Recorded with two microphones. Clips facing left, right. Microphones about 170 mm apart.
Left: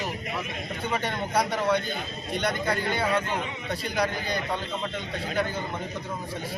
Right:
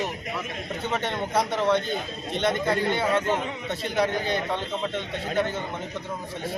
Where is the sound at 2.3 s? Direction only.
25° right (ahead or behind).